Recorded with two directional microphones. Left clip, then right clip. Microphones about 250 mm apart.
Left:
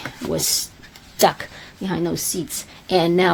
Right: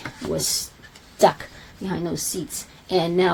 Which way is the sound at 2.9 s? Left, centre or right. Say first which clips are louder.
Left 3 dB; left.